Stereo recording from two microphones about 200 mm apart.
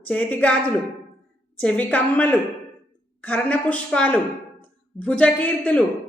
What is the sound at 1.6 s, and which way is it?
A woman's voice, 5° left (ahead or behind).